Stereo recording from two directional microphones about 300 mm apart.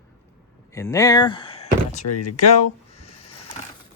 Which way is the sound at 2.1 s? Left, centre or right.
Left.